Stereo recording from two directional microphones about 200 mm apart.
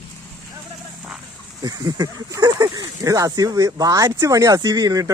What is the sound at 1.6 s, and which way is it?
Speech, 20° right (ahead or behind).